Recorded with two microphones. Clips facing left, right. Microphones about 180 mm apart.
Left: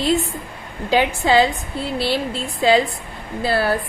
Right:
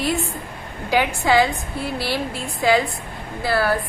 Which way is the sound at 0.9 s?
20° left (ahead or behind).